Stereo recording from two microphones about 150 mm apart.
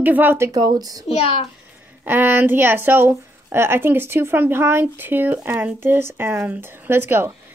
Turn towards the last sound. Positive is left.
turn(degrees=-15)  # may be behind; listen again after turning